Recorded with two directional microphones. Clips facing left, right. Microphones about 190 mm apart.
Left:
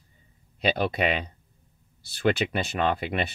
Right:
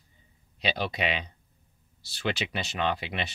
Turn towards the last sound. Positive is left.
turn(degrees=50)  # may be behind; listen again after turning